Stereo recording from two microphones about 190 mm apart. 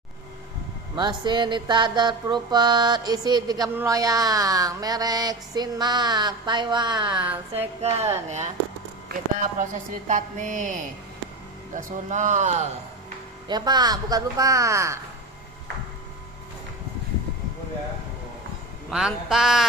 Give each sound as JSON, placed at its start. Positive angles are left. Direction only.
{"t": 0.9, "sound": "music", "side_deg": -25}
{"t": 8.3, "sound": "speech", "side_deg": -35}
{"t": 9.6, "sound": "a woman's voice", "side_deg": -45}
{"t": 13.5, "sound": "music", "side_deg": -20}
{"t": 18.9, "sound": "a man's voice", "side_deg": -5}